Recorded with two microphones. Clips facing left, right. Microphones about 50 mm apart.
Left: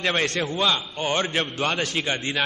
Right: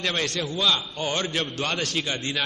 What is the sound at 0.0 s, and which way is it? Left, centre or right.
A man's voice, left.